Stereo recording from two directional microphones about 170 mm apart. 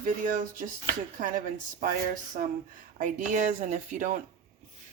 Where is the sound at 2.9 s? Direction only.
45° right (ahead or behind).